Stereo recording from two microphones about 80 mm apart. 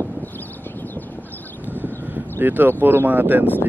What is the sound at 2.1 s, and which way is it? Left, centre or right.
Speech, right.